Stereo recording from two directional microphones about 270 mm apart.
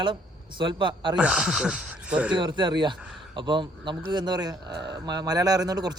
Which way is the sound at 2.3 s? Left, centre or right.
Centre.